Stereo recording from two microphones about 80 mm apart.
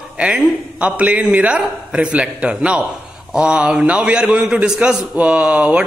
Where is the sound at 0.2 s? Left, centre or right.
Centre.